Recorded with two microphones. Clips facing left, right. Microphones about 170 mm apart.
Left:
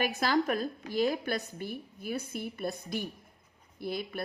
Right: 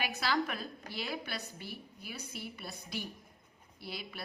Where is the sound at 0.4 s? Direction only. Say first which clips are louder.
Left 9 dB; 45° left (ahead or behind).